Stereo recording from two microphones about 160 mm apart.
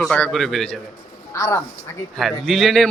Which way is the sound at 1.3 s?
20° left (ahead or behind).